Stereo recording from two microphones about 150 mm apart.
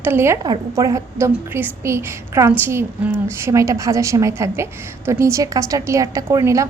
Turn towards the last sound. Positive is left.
turn(degrees=-20)  # may be behind; listen again after turning